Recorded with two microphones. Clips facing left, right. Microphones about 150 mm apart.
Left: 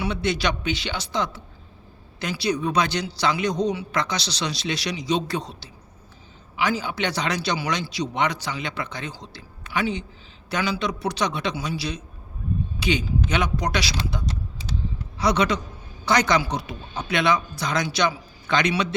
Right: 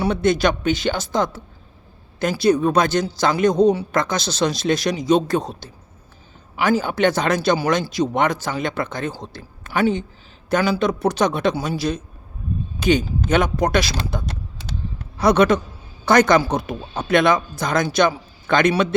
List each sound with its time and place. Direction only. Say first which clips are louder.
0.0 s a man's voice: right 7 dB; 45° right (ahead or behind)